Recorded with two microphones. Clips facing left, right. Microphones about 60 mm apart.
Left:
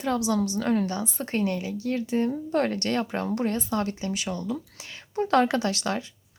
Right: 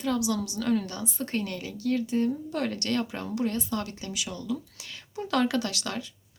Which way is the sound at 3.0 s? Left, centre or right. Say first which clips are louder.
Left 3 dB; left.